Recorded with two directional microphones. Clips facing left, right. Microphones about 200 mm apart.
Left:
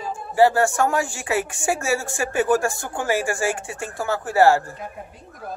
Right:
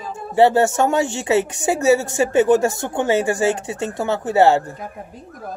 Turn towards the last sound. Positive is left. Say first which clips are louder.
# right 2 dB
turn(degrees=-20)  # may be behind; listen again after turning